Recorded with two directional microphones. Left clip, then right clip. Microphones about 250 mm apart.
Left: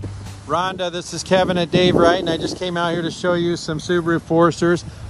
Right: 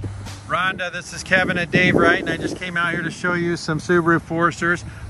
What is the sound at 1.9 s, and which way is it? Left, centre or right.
Speech, centre.